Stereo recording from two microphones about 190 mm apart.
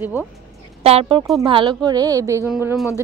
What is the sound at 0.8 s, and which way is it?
A woman's voice, 30° right (ahead or behind).